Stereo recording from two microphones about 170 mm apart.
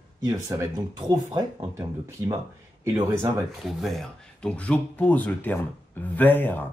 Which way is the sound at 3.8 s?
5° left (ahead or behind).